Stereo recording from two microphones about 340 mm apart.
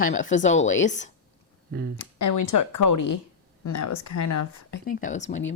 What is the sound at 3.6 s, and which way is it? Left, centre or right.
Speech, left.